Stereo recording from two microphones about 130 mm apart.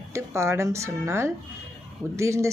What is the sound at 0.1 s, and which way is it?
Speech, 20° right (ahead or behind).